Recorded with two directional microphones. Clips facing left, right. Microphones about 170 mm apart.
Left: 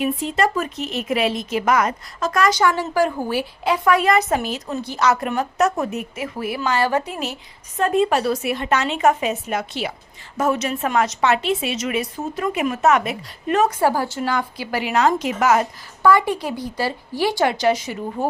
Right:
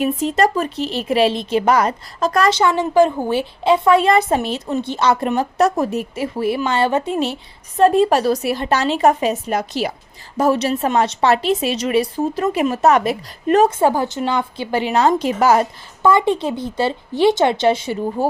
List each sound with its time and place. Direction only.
0.0 s a woman's voice: 40° right (ahead or behind)